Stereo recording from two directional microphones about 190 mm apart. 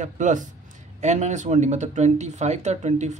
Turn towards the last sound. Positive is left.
turn(degrees=-40)  # may be behind; listen again after turning